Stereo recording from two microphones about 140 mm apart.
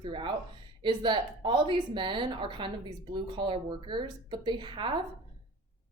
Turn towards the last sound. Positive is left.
turn(degrees=-35)  # may be behind; listen again after turning